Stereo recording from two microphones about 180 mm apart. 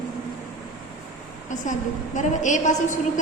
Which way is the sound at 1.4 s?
45° left (ahead or behind).